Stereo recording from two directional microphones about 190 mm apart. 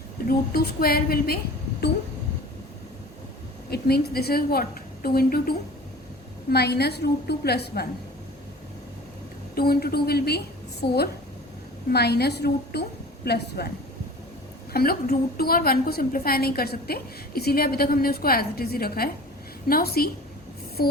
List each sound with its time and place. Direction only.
0.3 s a woman's voice: 55° left (ahead or behind)
3.7 s a woman's voice: 55° left (ahead or behind)
9.6 s a woman's voice: 55° left (ahead or behind)
14.7 s a woman's voice: 50° left (ahead or behind)